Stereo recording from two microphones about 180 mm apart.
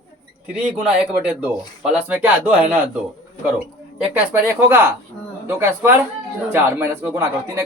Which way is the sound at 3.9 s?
10° right (ahead or behind).